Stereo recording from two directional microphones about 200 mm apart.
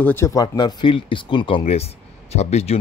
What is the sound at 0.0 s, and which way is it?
Speech, 10° left (ahead or behind).